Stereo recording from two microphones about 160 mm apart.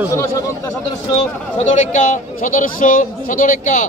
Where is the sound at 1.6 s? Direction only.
50° left (ahead or behind).